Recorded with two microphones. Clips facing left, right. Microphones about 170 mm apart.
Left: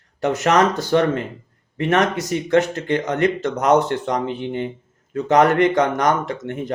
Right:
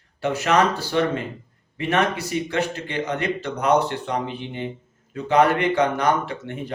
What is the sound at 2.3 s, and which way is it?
Speech, 45° left (ahead or behind).